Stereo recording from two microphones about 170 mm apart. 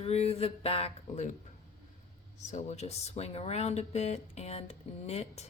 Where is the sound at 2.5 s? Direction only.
40° left (ahead or behind).